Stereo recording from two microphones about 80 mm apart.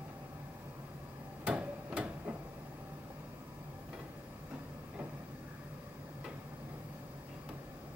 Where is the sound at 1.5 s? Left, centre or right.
Centre.